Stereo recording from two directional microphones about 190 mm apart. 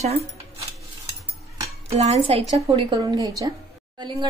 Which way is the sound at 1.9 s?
35° right (ahead or behind).